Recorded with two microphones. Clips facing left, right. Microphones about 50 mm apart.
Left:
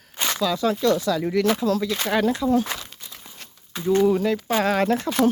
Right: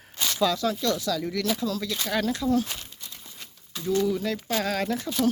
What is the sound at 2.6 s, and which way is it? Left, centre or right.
Crumpling, left.